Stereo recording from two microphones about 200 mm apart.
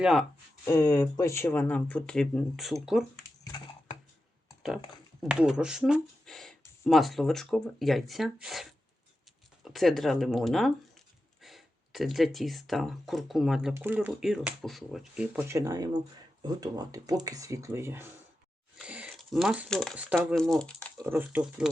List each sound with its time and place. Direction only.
0.0 s speech: centre (ahead or behind)
0.6 s speech: 15° left (ahead or behind); by 3.0 s centre (ahead or behind)
3.4 s typing: 20° left (ahead or behind)
5.2 s speech: 5° right (ahead or behind)
21.1 s speech: 10° right (ahead or behind)